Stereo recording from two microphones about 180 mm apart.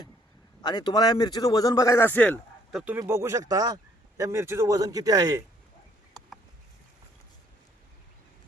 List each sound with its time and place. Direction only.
0.6 s a man's voice: 25° left (ahead or behind)
2.7 s speech: 10° right (ahead or behind)